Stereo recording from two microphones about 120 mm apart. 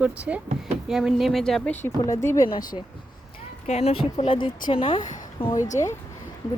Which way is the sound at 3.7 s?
65° left (ahead or behind).